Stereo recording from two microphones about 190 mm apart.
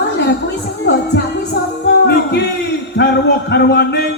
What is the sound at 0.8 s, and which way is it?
Music, 65° left (ahead or behind).